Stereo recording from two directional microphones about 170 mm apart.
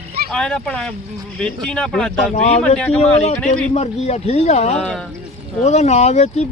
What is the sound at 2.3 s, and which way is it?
Speech, 45° left (ahead or behind).